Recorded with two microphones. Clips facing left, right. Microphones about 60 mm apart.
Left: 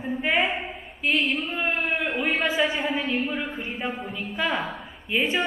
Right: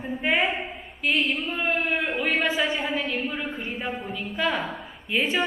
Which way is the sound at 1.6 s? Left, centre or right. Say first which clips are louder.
Right 2 dB; centre.